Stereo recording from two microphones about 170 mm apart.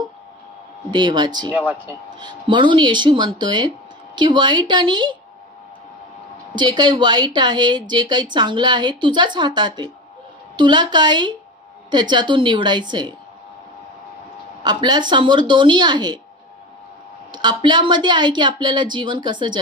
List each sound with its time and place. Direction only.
0.9 s speech: 25° right (ahead or behind)
1.5 s speech: 10° right (ahead or behind)
2.0 s speech: 25° right (ahead or behind)
6.5 s speech: 25° right (ahead or behind)
14.6 s speech: 25° right (ahead or behind)
17.3 s speech: 25° right (ahead or behind)